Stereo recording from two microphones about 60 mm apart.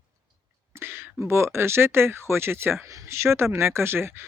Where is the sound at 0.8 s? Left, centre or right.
Right.